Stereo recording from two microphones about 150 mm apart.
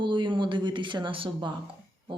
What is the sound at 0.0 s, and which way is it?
A woman's voice, 30° right (ahead or behind).